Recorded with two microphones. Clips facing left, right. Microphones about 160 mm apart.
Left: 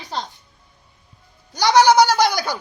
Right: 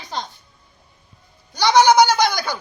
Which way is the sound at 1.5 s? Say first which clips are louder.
Even; 40° left (ahead or behind).